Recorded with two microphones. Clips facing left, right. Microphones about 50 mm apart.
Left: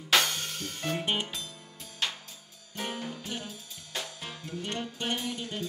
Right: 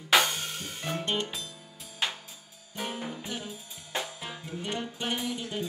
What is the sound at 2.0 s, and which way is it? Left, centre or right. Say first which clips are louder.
Music: right 1 dB; centre.